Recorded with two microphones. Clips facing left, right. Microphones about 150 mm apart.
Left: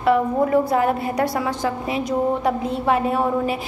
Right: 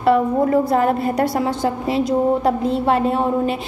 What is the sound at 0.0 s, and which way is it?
A woman's voice, 35° right (ahead or behind).